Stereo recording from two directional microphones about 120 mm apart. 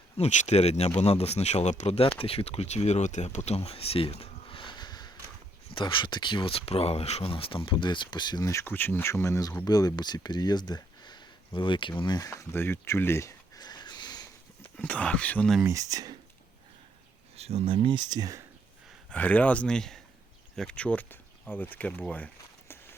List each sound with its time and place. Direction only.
0.2 s speech: 75° left (ahead or behind)
2.1 s speech: 50° left (ahead or behind)
8.4 s speech: 20° left (ahead or behind)
12.3 s speech: 20° left (ahead or behind)
13.6 s a sound: 35° left (ahead or behind)
14.8 s speech: 10° left (ahead or behind)
15.6 s speech: 30° right (ahead or behind)
17.3 s speech: 60° right (ahead or behind); by 18.4 s 30° right (ahead or behind)
19.1 s speech: 10° left (ahead or behind)